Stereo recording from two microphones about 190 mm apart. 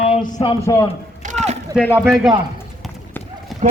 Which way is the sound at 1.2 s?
35° right (ahead or behind).